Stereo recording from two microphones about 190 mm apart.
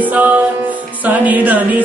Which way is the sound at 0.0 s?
10° right (ahead or behind).